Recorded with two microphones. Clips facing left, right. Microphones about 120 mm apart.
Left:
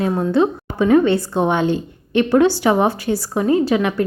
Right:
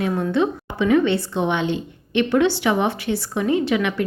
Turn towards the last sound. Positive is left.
turn(degrees=35)  # may be behind; listen again after turning